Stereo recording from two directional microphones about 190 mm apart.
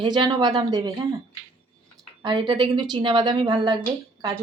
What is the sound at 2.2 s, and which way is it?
Speech, 25° right (ahead or behind).